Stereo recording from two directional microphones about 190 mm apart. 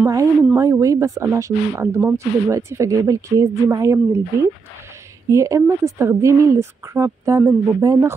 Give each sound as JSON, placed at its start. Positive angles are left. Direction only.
{"t": 0.0, "sound": "speech", "side_deg": -15}
{"t": 5.3, "sound": "speech", "side_deg": -15}